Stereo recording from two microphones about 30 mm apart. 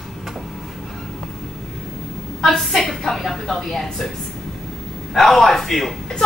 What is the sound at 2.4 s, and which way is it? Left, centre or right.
A woman's voice, centre.